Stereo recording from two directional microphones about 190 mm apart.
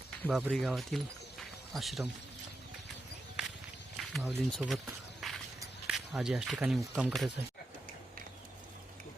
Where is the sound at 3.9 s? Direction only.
Centre (ahead or behind).